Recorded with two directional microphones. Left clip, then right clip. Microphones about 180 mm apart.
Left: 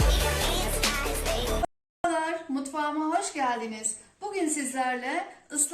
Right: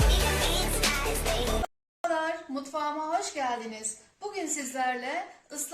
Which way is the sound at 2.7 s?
65° right (ahead or behind).